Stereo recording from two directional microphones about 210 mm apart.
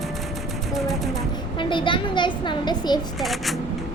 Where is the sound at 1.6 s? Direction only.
25° left (ahead or behind).